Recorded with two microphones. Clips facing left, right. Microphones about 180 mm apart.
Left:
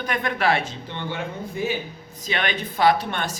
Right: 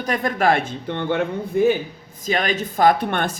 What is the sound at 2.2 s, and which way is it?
A man's voice, 40° right (ahead or behind).